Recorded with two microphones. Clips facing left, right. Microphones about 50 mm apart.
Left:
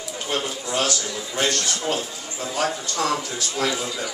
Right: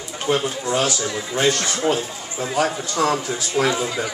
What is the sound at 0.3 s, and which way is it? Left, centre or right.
Speech, centre.